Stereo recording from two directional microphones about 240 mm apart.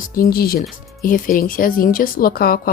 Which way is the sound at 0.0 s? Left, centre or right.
Left.